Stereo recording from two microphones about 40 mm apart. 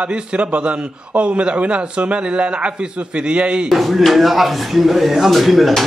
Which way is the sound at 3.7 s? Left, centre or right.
Centre.